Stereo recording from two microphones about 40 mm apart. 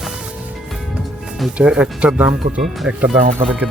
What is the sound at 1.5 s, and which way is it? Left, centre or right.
Speech, right.